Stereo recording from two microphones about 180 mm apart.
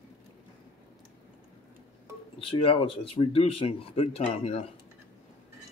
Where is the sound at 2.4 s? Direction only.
30° left (ahead or behind).